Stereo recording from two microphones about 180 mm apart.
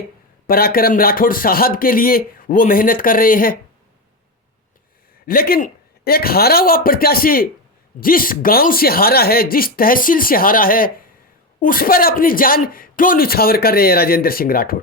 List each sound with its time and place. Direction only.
0.4 s a man's voice: 55° left (ahead or behind)
5.2 s a man's voice: 55° left (ahead or behind)